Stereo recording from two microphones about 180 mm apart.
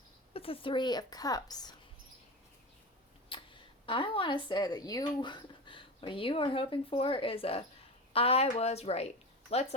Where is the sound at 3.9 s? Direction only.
30° left (ahead or behind).